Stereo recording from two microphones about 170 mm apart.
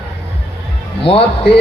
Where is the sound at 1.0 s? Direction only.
35° left (ahead or behind).